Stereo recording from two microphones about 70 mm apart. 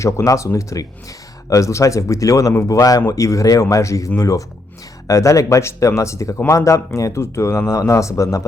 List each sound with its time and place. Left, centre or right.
0.3 s speech: left